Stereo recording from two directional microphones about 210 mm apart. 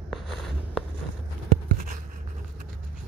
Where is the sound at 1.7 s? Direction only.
40° right (ahead or behind).